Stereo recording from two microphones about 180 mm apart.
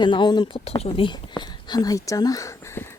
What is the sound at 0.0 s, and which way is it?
Speech, 25° left (ahead or behind).